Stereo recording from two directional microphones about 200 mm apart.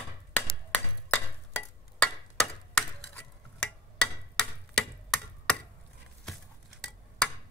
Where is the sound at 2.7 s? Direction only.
5° left (ahead or behind).